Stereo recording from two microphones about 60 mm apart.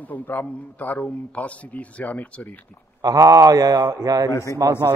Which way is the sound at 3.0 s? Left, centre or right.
Right.